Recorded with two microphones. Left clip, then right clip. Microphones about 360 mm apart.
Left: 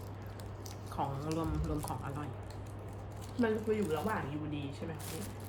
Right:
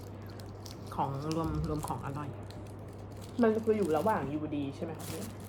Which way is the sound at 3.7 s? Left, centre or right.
Right.